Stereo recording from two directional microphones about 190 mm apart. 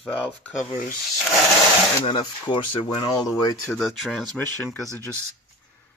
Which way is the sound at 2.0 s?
25° left (ahead or behind).